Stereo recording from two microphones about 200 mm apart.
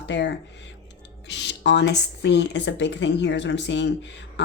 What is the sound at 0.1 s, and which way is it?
Speech, 60° left (ahead or behind).